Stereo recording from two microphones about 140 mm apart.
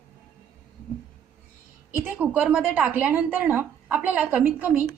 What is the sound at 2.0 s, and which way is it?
A woman's voice, 10° right (ahead or behind).